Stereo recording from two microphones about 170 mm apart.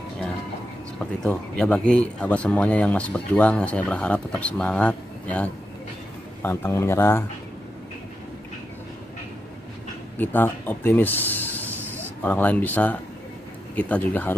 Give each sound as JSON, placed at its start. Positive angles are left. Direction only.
{"t": 0.9, "sound": "speech", "side_deg": 5}
{"t": 10.1, "sound": "speech", "side_deg": 10}